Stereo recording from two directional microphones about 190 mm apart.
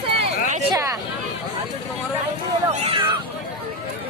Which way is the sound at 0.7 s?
15° right (ahead or behind).